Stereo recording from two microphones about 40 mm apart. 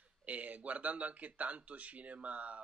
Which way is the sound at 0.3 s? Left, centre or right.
Right.